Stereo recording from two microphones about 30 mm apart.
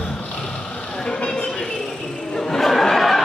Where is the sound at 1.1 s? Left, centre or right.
Left.